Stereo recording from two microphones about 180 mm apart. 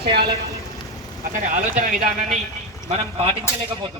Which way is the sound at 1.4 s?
40° right (ahead or behind).